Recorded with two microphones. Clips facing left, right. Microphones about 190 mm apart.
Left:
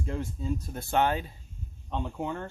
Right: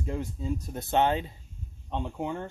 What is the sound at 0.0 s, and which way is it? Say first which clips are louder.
Speech: right 1 dB; 15° right (ahead or behind).